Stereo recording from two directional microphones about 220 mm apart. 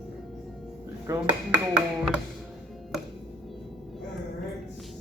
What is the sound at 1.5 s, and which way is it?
Music, 5° right (ahead or behind).